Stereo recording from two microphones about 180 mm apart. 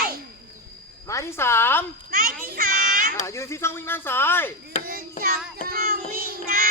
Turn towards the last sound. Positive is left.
turn(degrees=-55)  # may be behind; listen again after turning